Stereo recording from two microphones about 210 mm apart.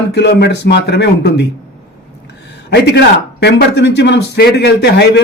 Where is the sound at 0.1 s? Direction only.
55° left (ahead or behind).